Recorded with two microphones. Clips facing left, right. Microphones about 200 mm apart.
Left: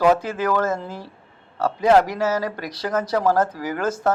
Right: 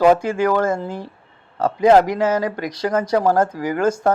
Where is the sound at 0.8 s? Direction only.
50° right (ahead or behind).